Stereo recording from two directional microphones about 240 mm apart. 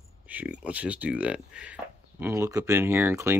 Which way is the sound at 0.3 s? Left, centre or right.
Centre.